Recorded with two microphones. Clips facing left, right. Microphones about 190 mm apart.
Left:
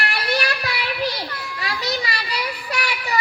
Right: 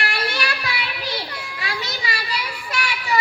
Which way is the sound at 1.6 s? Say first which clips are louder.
Left 4 dB; 35° left (ahead or behind).